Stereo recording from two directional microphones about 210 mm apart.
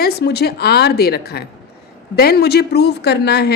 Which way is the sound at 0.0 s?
50° left (ahead or behind).